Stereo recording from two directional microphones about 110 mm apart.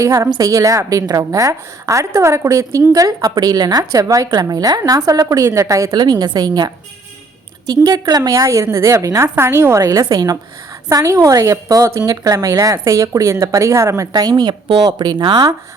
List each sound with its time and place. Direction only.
0.0 s a woman's voice: 35° right (ahead or behind)
7.7 s a woman's voice: 35° right (ahead or behind)
9.8 s a woman's voice: 35° right (ahead or behind)